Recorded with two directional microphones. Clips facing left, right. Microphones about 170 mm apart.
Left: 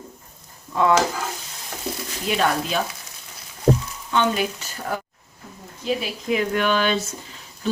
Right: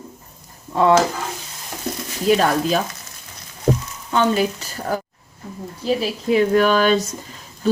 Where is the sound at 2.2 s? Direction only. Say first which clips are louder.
Right 6 dB; 40° right (ahead or behind).